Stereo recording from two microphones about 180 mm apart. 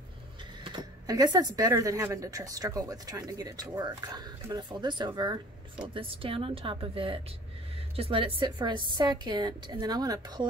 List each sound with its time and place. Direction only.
0.7 s a woman's voice: 20° right (ahead or behind)